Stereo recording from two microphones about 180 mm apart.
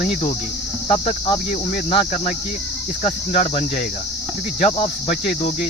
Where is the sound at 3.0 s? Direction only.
40° left (ahead or behind).